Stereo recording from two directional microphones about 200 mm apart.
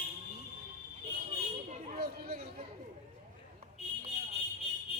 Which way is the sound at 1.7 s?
45° right (ahead or behind).